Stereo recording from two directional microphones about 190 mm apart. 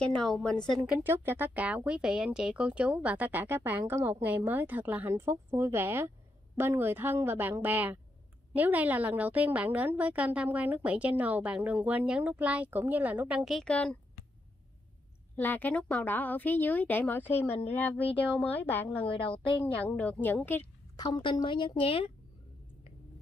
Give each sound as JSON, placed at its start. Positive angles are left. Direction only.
{"t": 0.0, "sound": "a woman's voice", "side_deg": 5}
{"t": 0.8, "sound": "speech", "side_deg": -10}
{"t": 15.3, "sound": "a woman's voice", "side_deg": 10}
{"t": 21.0, "sound": "a woman's voice", "side_deg": 25}